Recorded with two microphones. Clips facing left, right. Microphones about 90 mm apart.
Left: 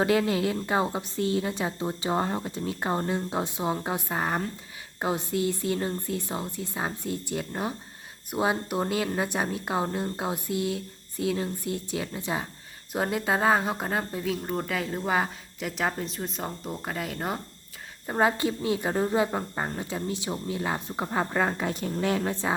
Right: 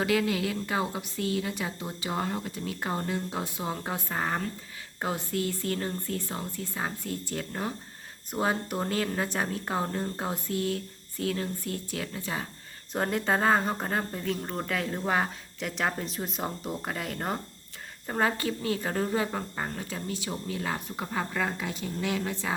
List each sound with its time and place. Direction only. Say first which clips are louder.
0.0 s a woman's voice: left 3 dB; 30° left (ahead or behind)
12.9 s a woman's voice: left 1 dB; 5° left (ahead or behind)
18.0 s a woman's voice: left 3 dB; 15° left (ahead or behind); by 22.1 s 50° left (ahead or behind)
22.1 s speech: left 4 dB; 40° left (ahead or behind)